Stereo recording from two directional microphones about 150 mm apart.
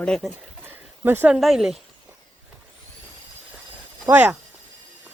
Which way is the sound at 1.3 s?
Centre (ahead or behind).